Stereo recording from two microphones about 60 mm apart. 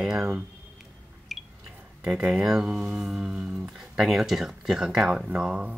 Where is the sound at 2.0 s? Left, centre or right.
Centre.